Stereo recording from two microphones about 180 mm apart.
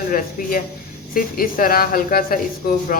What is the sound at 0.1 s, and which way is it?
A woman's voice, 50° left (ahead or behind).